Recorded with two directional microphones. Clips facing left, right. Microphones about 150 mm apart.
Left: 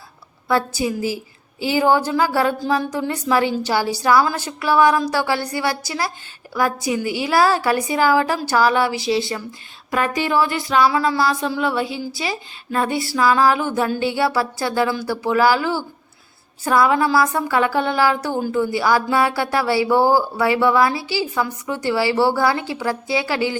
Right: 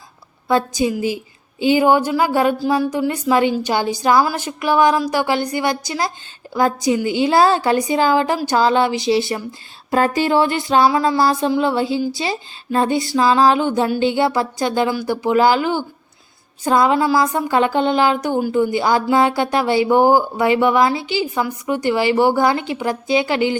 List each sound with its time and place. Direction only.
0.4 s a woman's voice: 20° right (ahead or behind)
5.5 s music: 20° right (ahead or behind)